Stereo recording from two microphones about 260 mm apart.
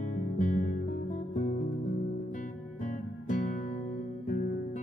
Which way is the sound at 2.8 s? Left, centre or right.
Left.